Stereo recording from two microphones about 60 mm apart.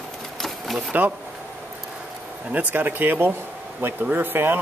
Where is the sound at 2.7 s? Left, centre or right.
Right.